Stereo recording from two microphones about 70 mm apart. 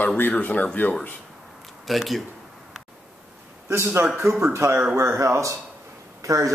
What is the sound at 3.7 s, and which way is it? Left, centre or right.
A man's voice, right.